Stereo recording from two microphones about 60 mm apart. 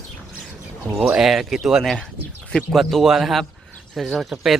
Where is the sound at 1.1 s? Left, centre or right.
Centre.